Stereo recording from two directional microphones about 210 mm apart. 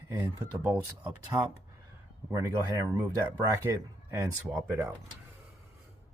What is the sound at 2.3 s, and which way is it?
Speech, 15° right (ahead or behind).